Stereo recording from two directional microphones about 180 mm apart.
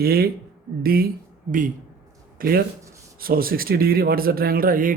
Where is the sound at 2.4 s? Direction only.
55° right (ahead or behind).